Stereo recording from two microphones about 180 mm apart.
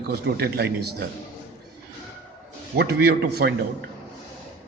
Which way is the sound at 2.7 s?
60° right (ahead or behind).